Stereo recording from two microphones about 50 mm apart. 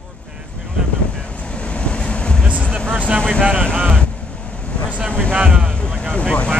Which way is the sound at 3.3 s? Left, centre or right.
Right.